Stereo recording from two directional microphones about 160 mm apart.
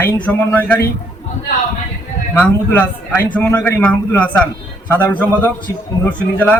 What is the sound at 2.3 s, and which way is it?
A man's voice, 10° left (ahead or behind).